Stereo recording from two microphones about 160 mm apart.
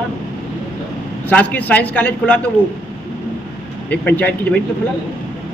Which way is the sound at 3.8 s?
10° left (ahead or behind).